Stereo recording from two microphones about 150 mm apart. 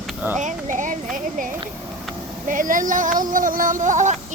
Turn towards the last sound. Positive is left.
turn(degrees=-55)  # may be behind; listen again after turning